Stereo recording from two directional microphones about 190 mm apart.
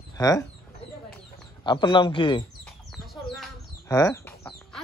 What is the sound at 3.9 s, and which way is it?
Chicken, 15° left (ahead or behind).